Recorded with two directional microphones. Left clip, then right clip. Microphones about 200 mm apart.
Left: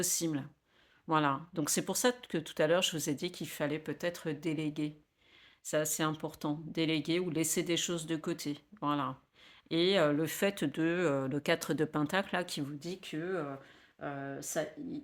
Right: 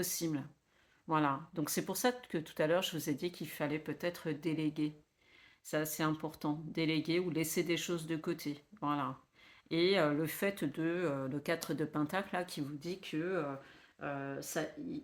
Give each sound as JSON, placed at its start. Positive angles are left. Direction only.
{"t": 0.0, "sound": "speech", "side_deg": 35}